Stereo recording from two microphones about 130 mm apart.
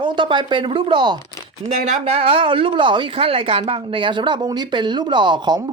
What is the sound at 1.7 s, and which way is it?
Speech, 65° right (ahead or behind).